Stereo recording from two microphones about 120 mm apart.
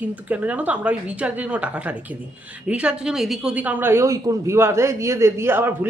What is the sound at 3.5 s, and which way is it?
A man's voice, 15° right (ahead or behind).